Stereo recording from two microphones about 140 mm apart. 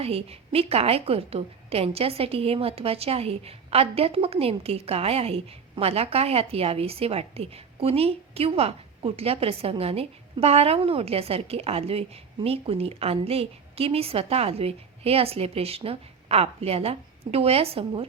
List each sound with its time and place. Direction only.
0.0 s a woman's voice: 45° right (ahead or behind)